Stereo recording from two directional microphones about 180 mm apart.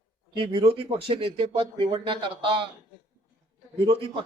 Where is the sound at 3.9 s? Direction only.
30° right (ahead or behind).